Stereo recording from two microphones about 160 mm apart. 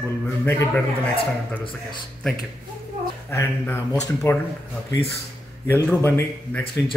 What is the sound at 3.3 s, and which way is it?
Speech, 15° left (ahead or behind).